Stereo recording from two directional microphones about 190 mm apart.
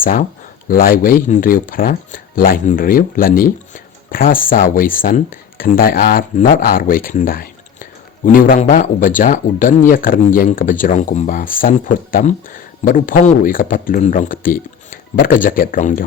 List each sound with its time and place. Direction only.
0.0 s speech: 45° left (ahead or behind)